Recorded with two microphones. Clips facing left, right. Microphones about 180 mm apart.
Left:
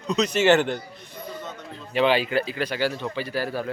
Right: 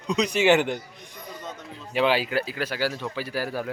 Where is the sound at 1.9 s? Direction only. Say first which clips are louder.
Left 2 dB; 5° right (ahead or behind).